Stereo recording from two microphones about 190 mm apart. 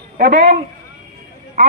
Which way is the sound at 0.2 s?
45° right (ahead or behind).